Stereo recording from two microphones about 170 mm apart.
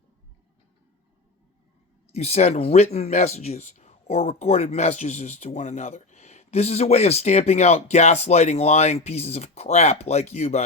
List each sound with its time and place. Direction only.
2.1 s speech: 40° left (ahead or behind)